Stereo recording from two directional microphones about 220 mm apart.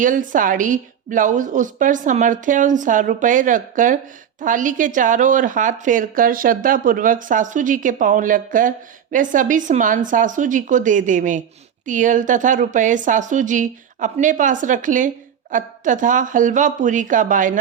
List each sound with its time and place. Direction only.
0.0 s a woman's voice: 35° right (ahead or behind)